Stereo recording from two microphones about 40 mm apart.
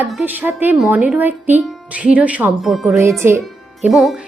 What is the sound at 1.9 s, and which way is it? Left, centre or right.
Speech, right.